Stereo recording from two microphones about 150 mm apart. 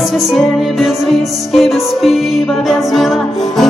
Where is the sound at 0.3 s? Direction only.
Centre (ahead or behind).